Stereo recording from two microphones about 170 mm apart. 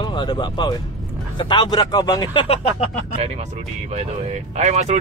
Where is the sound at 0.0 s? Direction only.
25° left (ahead or behind).